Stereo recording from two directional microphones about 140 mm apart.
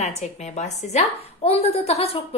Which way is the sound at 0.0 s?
55° left (ahead or behind).